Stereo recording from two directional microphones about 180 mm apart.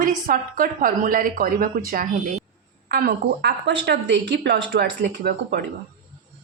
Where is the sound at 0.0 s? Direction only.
50° right (ahead or behind).